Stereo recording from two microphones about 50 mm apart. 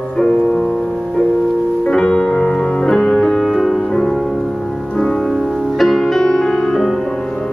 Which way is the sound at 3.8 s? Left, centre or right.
Centre.